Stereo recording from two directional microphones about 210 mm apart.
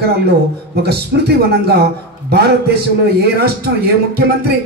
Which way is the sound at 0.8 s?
50° right (ahead or behind).